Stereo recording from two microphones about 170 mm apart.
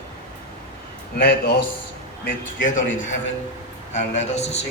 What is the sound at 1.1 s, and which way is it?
Speech, 70° left (ahead or behind).